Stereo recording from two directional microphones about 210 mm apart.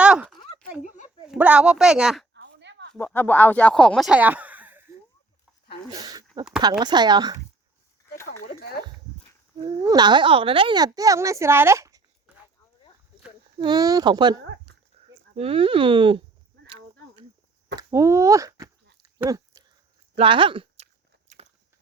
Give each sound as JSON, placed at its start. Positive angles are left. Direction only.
{"t": 0.0, "sound": "a sound", "side_deg": -5}
{"t": 0.8, "sound": "a sound", "side_deg": 35}
{"t": 1.3, "sound": "speech", "side_deg": -5}
{"t": 2.3, "sound": "a sound", "side_deg": -55}
{"t": 2.9, "sound": "speech", "side_deg": 10}
{"t": 5.9, "sound": "speech", "side_deg": -15}
{"t": 9.6, "sound": "speech", "side_deg": -20}
{"t": 13.6, "sound": "speech", "side_deg": -20}
{"t": 17.7, "sound": "speech", "side_deg": -15}
{"t": 19.2, "sound": "dog", "side_deg": -20}
{"t": 20.1, "sound": "chewing", "side_deg": -25}